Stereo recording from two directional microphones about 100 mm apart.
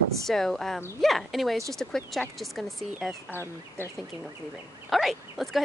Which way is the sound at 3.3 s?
25° left (ahead or behind).